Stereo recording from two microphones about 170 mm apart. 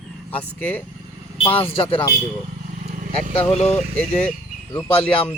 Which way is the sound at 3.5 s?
40° left (ahead or behind).